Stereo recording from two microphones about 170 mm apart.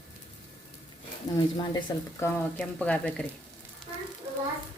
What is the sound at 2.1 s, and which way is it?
A woman's voice, 10° left (ahead or behind).